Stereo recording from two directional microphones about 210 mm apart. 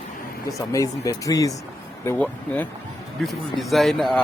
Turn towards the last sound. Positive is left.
turn(degrees=0)  # may be behind; listen again after turning